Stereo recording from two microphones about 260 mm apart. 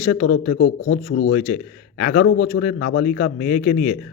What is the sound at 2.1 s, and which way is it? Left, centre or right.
Speech, left.